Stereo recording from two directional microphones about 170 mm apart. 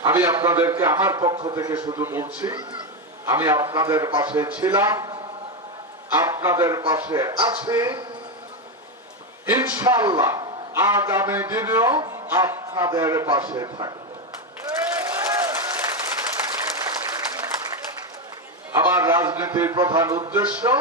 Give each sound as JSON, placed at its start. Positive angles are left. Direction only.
{"t": 0.0, "sound": "a man's voice", "side_deg": -15}
{"t": 9.5, "sound": "a man's voice", "side_deg": -15}
{"t": 14.9, "sound": "applause", "side_deg": -15}
{"t": 18.7, "sound": "speech", "side_deg": -15}